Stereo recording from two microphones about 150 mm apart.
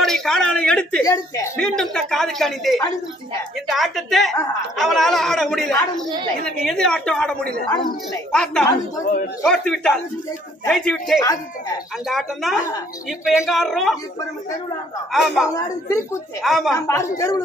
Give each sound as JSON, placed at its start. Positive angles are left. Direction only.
{"t": 0.0, "sound": "a man's voice", "side_deg": 5}
{"t": 1.0, "sound": "a woman's voice", "side_deg": 20}
{"t": 1.8, "sound": "a woman's voice", "side_deg": 5}
{"t": 15.1, "sound": "a woman's voice", "side_deg": 0}
{"t": 15.5, "sound": "a woman's voice", "side_deg": 20}
{"t": 16.4, "sound": "a woman's voice", "side_deg": 0}
{"t": 16.7, "sound": "a woman's voice", "side_deg": 20}